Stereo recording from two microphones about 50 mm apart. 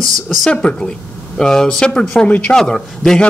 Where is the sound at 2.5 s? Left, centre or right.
Centre.